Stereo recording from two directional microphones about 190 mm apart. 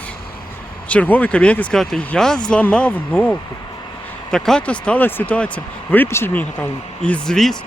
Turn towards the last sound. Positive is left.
turn(degrees=5)  # may be behind; listen again after turning